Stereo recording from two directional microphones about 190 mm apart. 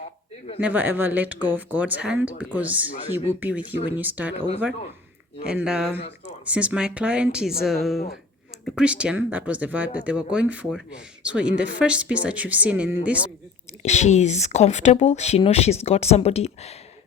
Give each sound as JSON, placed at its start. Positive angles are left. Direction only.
{"t": 0.6, "sound": "speech", "side_deg": -10}
{"t": 5.5, "sound": "speech", "side_deg": -5}
{"t": 13.8, "sound": "speech", "side_deg": 35}